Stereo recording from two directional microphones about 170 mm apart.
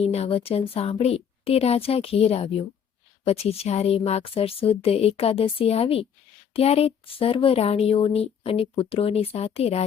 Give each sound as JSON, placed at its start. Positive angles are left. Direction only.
{"t": 0.0, "sound": "speech", "side_deg": 35}